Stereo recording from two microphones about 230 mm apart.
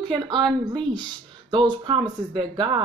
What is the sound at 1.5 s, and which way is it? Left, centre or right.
Speech, right.